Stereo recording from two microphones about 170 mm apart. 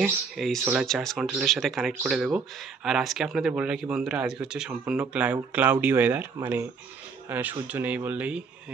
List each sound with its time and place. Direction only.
0.0 s speech: centre (ahead or behind)